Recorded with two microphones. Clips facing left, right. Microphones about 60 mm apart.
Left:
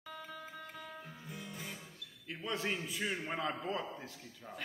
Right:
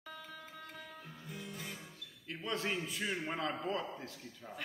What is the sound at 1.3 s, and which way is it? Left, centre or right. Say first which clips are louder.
Music: right 1 dB; centre.